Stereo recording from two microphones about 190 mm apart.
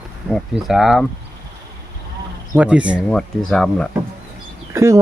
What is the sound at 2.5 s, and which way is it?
Speech, 5° right (ahead or behind).